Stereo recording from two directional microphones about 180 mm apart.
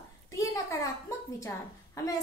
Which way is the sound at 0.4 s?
15° left (ahead or behind).